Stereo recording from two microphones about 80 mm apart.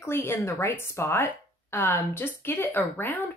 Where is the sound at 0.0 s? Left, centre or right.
Left.